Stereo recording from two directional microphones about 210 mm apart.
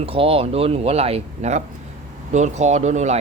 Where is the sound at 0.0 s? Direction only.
25° right (ahead or behind).